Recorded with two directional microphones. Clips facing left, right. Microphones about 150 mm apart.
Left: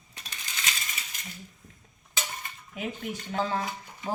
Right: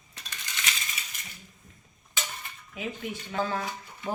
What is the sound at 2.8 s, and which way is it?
Speech, 45° left (ahead or behind).